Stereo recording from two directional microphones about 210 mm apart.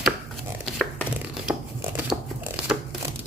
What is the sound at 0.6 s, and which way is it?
Tearing, centre (ahead or behind).